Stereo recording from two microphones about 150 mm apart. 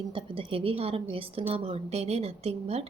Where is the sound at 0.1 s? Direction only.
35° right (ahead or behind).